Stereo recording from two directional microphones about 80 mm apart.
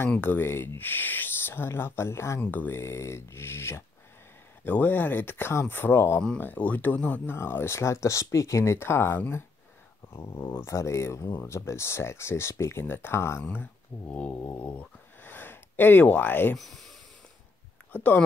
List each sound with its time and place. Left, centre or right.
0.2 s speech: left
2.4 s speech: left
13.5 s speech: centre
16.5 s speech: centre
18.1 s speech: left